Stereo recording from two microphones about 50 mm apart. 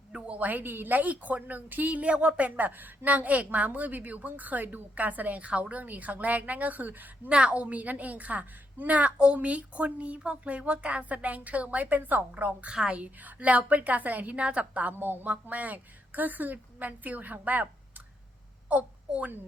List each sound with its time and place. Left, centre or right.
0.1 s a woman's voice: right
7.3 s a woman's voice: right
14.9 s a woman's voice: right
15.3 s a woman's voice: right